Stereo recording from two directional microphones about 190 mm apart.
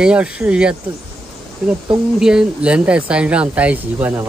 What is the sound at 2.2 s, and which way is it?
Speech, 5° right (ahead or behind).